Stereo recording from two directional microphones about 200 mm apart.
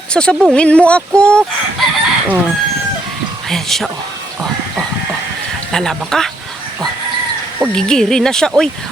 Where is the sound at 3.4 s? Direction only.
Centre (ahead or behind).